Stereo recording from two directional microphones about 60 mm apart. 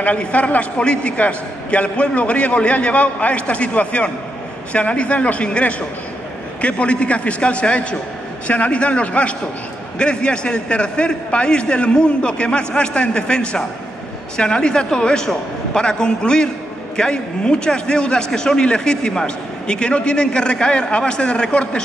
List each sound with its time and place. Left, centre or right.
0.0 s a man's voice: left